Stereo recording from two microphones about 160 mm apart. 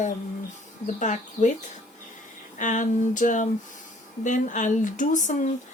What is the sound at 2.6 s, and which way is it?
A woman's voice, 50° left (ahead or behind).